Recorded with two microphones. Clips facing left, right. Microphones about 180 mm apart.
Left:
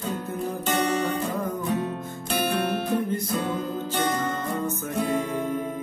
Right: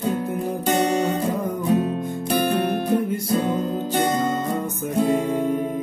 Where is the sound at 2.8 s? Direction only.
10° right (ahead or behind).